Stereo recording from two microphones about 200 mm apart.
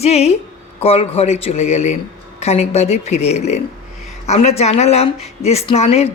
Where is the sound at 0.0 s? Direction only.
30° left (ahead or behind).